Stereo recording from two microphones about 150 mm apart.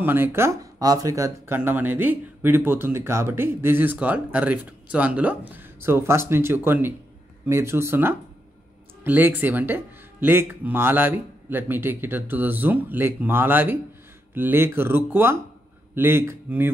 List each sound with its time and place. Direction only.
0.0 s speech: 15° right (ahead or behind)